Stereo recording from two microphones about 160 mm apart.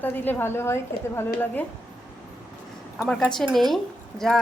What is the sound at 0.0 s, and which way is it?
A woman's voice, 10° left (ahead or behind).